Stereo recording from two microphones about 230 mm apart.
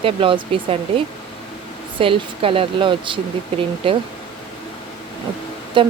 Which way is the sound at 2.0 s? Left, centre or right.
Right.